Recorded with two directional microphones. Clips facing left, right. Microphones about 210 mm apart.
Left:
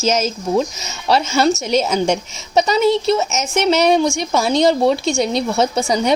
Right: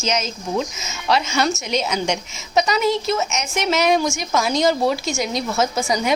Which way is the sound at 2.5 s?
30° left (ahead or behind).